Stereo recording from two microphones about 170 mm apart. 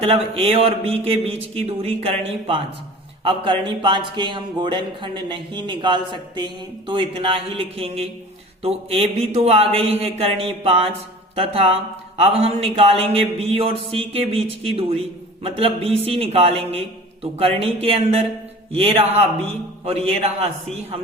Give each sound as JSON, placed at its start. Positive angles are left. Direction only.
{"t": 0.4, "sound": "speech", "side_deg": -35}